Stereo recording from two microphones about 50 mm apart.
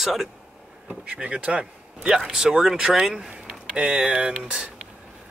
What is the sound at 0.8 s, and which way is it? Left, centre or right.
Speech, right.